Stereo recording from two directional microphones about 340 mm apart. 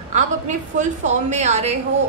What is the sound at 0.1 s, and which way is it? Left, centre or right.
A woman's voice, right.